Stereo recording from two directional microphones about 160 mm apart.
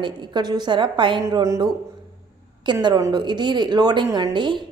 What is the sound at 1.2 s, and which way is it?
Speech, 20° right (ahead or behind).